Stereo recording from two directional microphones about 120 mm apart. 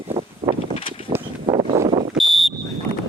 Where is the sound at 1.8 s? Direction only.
45° right (ahead or behind).